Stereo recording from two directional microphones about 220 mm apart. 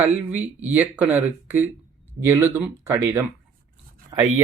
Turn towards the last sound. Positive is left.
turn(degrees=-20)  # may be behind; listen again after turning